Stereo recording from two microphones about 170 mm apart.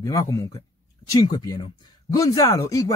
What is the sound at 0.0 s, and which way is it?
Speech, 20° left (ahead or behind).